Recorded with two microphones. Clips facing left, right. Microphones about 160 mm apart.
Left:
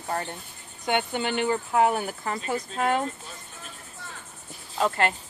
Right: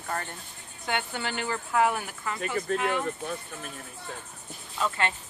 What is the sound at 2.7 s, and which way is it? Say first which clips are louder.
Speech: right 2 dB; 65° right (ahead or behind).